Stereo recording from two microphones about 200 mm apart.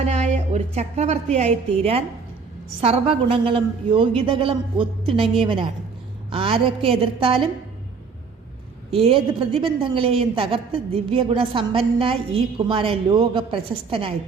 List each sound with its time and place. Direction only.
0.0 s a woman's voice: 35° right (ahead or behind)
8.9 s a woman's voice: 30° right (ahead or behind)